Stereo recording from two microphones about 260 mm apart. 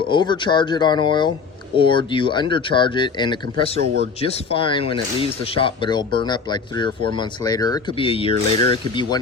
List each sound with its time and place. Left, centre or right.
0.1 s speech: centre